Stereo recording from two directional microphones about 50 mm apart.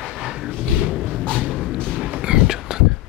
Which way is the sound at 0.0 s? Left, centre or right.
Centre.